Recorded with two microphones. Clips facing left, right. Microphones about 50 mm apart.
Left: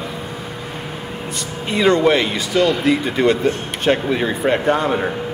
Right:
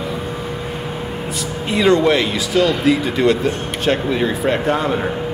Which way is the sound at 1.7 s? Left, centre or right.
Centre.